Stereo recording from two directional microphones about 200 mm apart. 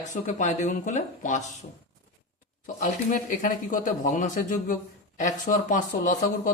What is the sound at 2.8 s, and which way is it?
Speech, 40° left (ahead or behind).